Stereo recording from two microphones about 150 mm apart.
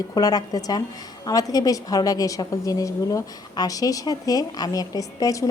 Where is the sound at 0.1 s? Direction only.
25° left (ahead or behind).